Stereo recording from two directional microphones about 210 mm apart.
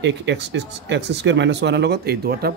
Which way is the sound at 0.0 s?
55° right (ahead or behind).